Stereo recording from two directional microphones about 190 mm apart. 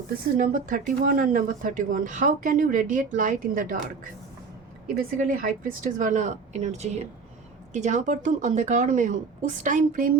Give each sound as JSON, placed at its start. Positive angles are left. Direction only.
{"t": 0.3, "sound": "speech", "side_deg": -45}